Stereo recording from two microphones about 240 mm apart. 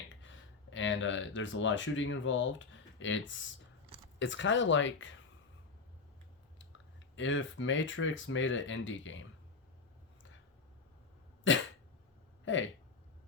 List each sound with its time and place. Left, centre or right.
0.1 s speech: left
6.6 s speech: left
11.5 s dog: left
12.5 s speech: left